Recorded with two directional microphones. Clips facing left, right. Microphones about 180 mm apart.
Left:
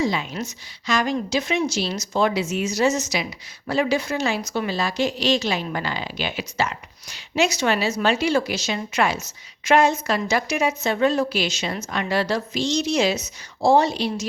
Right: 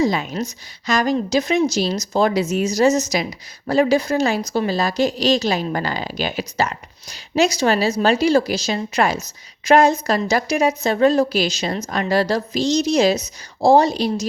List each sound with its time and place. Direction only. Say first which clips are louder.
0.0 s a woman's voice: right 4 dB; 45° right (ahead or behind)